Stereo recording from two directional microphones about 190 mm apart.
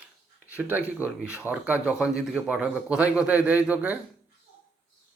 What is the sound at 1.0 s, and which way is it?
A man's voice, 10° right (ahead or behind).